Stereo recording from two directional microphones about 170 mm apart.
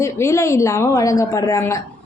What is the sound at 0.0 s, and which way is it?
A woman's voice, 15° left (ahead or behind).